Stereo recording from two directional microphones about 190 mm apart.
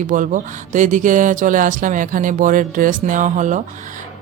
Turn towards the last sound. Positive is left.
turn(degrees=-40)  # may be behind; listen again after turning